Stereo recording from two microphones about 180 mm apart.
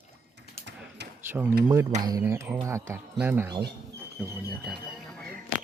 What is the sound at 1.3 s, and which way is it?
Speech, 10° right (ahead or behind).